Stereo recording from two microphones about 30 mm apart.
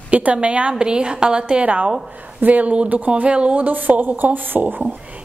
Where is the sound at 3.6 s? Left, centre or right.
Right.